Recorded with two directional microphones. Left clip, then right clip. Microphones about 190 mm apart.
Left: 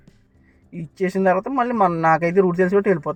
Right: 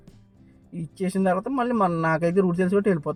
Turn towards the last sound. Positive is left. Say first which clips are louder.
# left 5 dB
turn(degrees=-10)  # may be behind; listen again after turning